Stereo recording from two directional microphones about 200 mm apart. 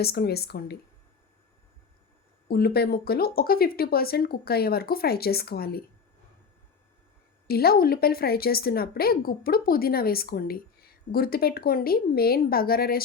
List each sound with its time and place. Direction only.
0.0 s a woman's voice: 50° left (ahead or behind)
2.5 s a woman's voice: 50° left (ahead or behind)
7.4 s a woman's voice: 50° left (ahead or behind)